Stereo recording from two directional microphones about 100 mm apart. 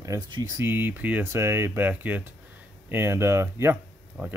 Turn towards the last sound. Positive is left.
turn(degrees=-15)  # may be behind; listen again after turning